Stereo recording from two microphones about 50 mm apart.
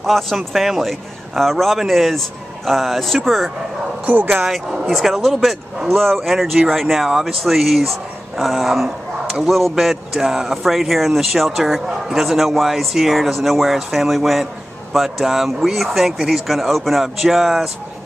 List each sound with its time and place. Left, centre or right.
0.0 s a man's voice: centre
4.0 s speech: right
4.8 s a man's voice: centre